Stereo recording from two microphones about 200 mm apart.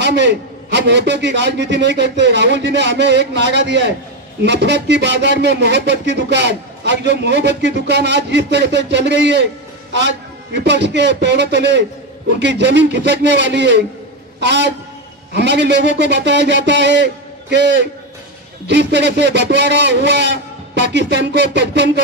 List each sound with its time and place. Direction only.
0.0 s a man's voice: 60° right (ahead or behind)